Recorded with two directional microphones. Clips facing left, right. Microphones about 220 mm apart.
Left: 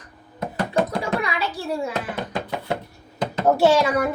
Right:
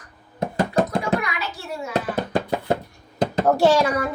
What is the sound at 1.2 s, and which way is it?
Hands, 30° left (ahead or behind).